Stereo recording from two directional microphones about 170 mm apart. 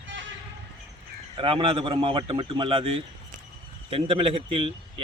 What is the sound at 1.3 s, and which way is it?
A man's voice, 30° right (ahead or behind).